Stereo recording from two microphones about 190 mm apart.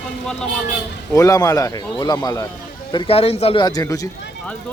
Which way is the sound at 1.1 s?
15° left (ahead or behind).